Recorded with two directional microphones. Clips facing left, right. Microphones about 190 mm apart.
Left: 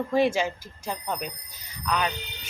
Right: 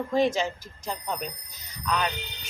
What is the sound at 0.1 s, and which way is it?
Speech, 10° left (ahead or behind).